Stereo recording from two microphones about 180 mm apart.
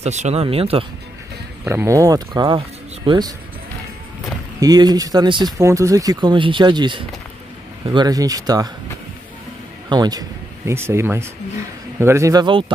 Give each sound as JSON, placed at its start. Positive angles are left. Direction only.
{"t": 0.0, "sound": "speech", "side_deg": -40}
{"t": 1.6, "sound": "speech", "side_deg": -15}
{"t": 4.6, "sound": "speech", "side_deg": -20}
{"t": 9.8, "sound": "speech", "side_deg": -20}